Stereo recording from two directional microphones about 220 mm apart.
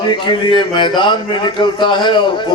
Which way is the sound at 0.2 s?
20° left (ahead or behind).